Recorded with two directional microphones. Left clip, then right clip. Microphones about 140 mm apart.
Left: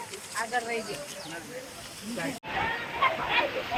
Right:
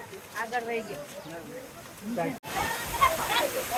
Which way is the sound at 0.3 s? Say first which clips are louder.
Left 1 dB; 55° left (ahead or behind).